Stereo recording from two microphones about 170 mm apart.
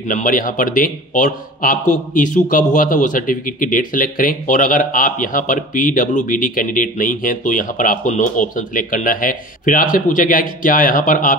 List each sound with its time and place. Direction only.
0.1 s speech: 50° left (ahead or behind)